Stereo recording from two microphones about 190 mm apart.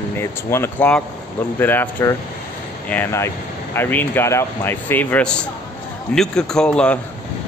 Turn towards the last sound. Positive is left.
turn(degrees=5)  # may be behind; listen again after turning